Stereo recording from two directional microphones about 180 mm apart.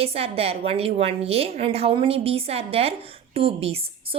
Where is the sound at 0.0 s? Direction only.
35° right (ahead or behind).